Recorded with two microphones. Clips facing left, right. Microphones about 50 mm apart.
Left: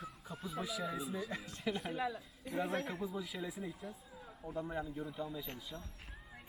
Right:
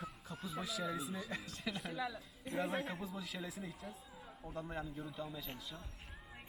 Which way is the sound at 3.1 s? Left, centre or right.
Centre.